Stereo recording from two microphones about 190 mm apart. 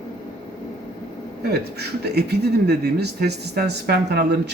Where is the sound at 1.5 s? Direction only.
60° right (ahead or behind).